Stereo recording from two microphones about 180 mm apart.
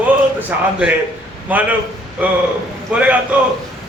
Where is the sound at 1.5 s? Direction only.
10° right (ahead or behind).